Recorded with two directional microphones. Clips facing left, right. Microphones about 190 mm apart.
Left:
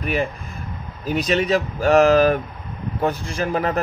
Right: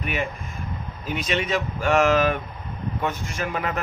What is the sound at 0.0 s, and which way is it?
Speech, 40° left (ahead or behind).